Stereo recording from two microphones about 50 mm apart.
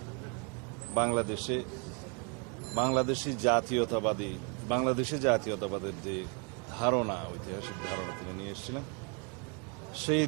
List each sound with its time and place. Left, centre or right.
0.9 s a man's voice: centre
2.7 s a man's voice: centre
10.1 s a man's voice: centre